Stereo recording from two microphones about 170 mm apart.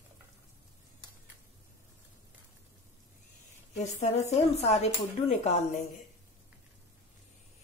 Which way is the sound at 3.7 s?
40° left (ahead or behind).